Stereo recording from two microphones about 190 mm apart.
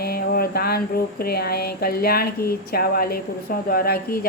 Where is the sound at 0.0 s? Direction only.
50° left (ahead or behind).